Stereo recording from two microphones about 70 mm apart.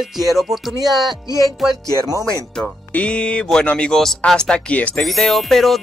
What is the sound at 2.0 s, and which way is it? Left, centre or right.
Speech, right.